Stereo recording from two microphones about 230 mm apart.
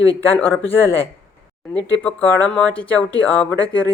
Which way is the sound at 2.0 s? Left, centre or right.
Centre.